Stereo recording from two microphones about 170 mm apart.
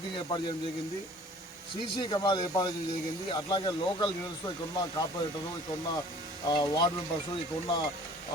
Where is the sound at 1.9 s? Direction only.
25° left (ahead or behind).